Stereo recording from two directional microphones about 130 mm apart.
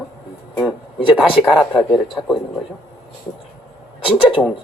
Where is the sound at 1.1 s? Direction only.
Centre (ahead or behind).